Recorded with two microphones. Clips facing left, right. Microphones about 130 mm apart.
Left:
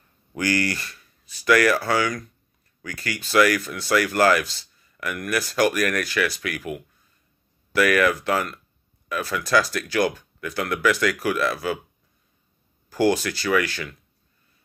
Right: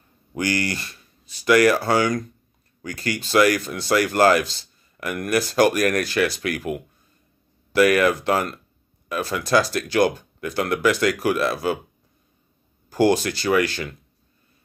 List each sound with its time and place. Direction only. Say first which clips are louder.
0.3 s speech: even; 20° right (ahead or behind)
12.9 s speech: right 2 dB; 25° right (ahead or behind)